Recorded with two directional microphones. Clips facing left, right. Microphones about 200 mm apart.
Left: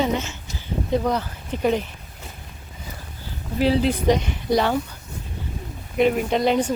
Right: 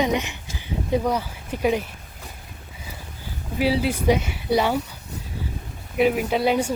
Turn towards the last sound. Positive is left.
turn(degrees=-5)  # may be behind; listen again after turning